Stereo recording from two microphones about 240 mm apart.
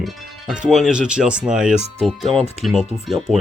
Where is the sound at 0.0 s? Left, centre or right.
Centre.